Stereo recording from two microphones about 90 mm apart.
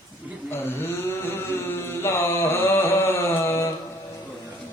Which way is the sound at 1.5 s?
30° left (ahead or behind).